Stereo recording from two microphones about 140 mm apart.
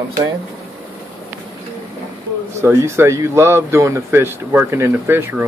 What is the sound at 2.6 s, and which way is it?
Speech, 20° right (ahead or behind).